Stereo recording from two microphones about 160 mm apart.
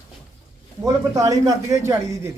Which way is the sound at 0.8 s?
20° right (ahead or behind).